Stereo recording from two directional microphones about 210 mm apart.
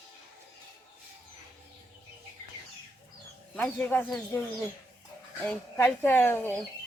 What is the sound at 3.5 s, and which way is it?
Speech, 5° left (ahead or behind).